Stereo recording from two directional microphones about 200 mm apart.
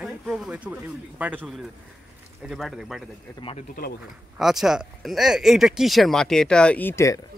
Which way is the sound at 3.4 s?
30° left (ahead or behind).